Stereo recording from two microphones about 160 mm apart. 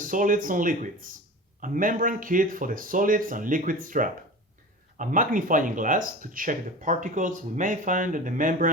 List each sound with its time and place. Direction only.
0.0 s speech: 55° right (ahead or behind)